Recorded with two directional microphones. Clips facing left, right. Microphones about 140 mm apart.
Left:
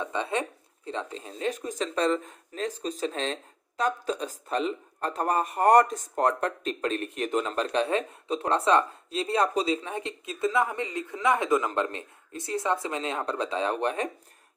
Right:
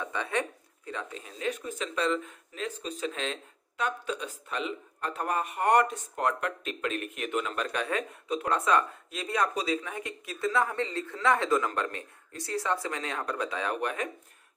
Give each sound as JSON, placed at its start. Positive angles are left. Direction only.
{"t": 0.0, "sound": "speech", "side_deg": 20}